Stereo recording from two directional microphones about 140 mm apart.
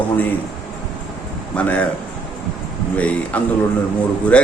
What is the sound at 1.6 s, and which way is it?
Speech, 10° left (ahead or behind).